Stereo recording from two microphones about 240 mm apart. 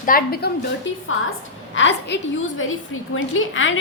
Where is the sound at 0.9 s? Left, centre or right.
Left.